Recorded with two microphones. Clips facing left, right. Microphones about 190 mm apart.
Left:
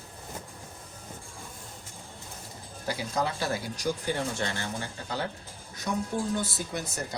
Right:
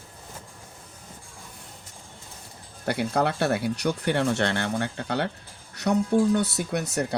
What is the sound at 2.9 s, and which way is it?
Speech, 65° right (ahead or behind).